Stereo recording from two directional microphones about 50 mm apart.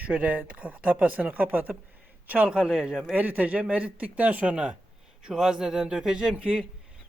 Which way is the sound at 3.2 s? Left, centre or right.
Right.